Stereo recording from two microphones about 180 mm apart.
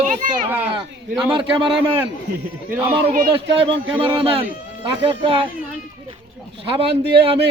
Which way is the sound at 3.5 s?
30° right (ahead or behind).